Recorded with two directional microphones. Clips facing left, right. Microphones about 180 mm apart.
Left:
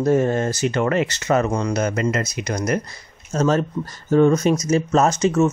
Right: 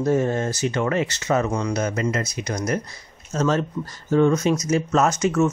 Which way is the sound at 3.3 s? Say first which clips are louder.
Left 3 dB; 45° left (ahead or behind).